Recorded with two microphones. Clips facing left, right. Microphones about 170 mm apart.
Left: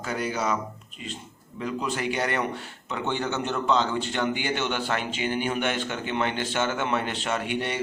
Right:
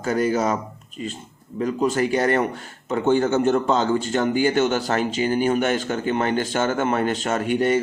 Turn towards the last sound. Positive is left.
turn(degrees=-45)  # may be behind; listen again after turning